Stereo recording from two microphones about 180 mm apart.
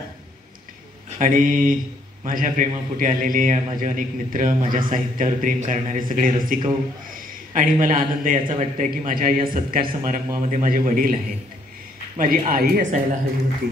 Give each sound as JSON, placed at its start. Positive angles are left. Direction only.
{"t": 1.2, "sound": "a man's voice", "side_deg": -50}
{"t": 12.2, "sound": "a man's voice", "side_deg": -50}